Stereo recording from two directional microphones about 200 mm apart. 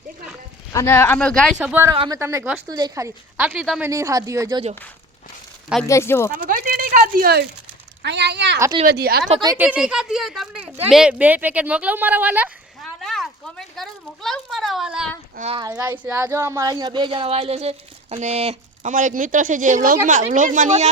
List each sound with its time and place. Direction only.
0.7 s speech: 15° left (ahead or behind)
1.5 s a woman's voice: 10° right (ahead or behind)
2.6 s a woman's voice: 20° right (ahead or behind)
5.9 s speech: 15° left (ahead or behind)
6.3 s speech: 45° right (ahead or behind)
8.0 s speech: 60° right (ahead or behind)
8.5 s a woman's voice: 15° right (ahead or behind)
8.9 s speech: 50° right (ahead or behind)
9.4 s a woman's voice: 15° right (ahead or behind)
9.6 s a woman's voice: 5° right (ahead or behind)
15.4 s speech: 30° right (ahead or behind)
15.6 s speech: 15° right (ahead or behind); by 20.9 s 35° right (ahead or behind)